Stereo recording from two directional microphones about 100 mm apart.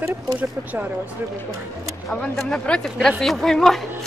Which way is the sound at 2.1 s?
5° left (ahead or behind).